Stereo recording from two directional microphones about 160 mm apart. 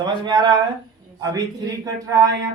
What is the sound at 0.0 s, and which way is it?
Speech, 25° right (ahead or behind).